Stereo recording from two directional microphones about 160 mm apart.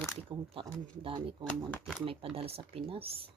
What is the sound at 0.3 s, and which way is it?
Speech, 25° right (ahead or behind).